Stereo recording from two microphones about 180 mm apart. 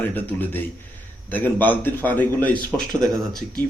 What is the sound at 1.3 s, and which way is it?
A man's voice, 10° left (ahead or behind).